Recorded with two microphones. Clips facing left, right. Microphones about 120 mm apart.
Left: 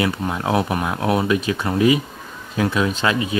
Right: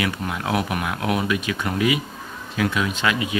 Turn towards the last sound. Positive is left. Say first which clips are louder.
# left 2 dB
turn(degrees=30)  # may be behind; listen again after turning